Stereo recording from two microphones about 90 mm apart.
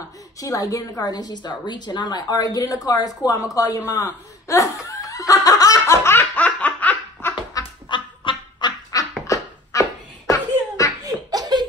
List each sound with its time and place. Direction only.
0.4 s a woman's voice: 40° left (ahead or behind)
3.9 s laughter: 40° left (ahead or behind)
6.0 s laughter: 20° left (ahead or behind)
7.6 s duck: 40° left (ahead or behind)
7.9 s goose: 65° left (ahead or behind)
9.3 s dog: 35° left (ahead or behind)
11.0 s laughter: 45° right (ahead or behind)